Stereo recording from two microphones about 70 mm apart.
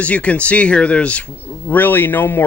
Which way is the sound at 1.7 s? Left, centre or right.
Left.